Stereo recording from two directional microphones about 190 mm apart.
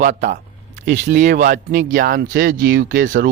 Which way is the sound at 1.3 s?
40° right (ahead or behind).